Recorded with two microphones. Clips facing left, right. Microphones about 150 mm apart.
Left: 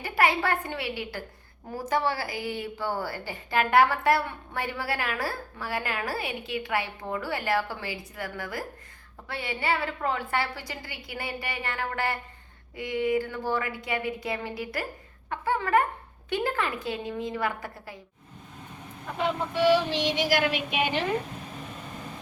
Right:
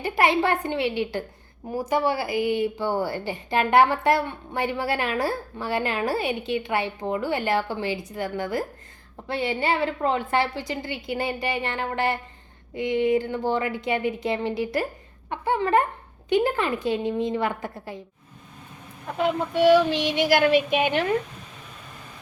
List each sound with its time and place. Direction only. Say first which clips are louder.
0.0 s a woman's voice: right 4 dB; 20° right (ahead or behind)
20.1 s child singing: right 10 dB; 50° right (ahead or behind)